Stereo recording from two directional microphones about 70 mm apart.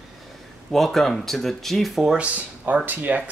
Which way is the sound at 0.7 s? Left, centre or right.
Centre.